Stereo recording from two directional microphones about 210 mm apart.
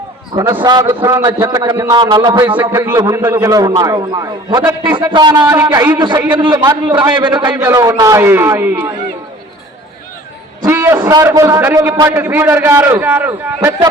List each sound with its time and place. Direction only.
0.3 s a man's voice: 15° right (ahead or behind)
2.6 s a man's voice: 10° right (ahead or behind)
10.6 s a man's voice: 15° right (ahead or behind)